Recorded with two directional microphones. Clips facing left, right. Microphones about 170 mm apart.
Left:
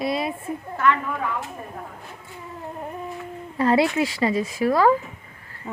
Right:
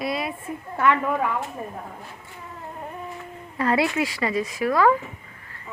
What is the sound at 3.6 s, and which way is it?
A woman's voice, 30° left (ahead or behind).